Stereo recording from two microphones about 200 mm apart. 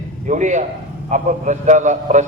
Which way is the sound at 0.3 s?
40° right (ahead or behind).